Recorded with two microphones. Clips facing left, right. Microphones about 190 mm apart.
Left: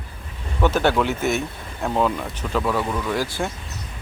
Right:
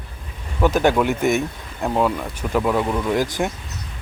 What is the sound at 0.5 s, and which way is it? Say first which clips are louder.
Speech: right 2 dB; 10° right (ahead or behind).